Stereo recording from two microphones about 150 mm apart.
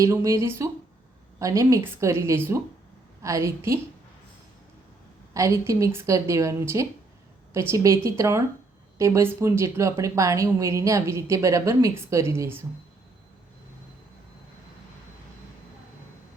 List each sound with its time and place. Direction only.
0.0 s a woman's voice: 20° right (ahead or behind)
5.3 s a woman's voice: 20° right (ahead or behind)